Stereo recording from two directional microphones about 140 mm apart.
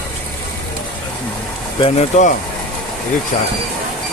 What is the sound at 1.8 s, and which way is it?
Speech, 50° left (ahead or behind).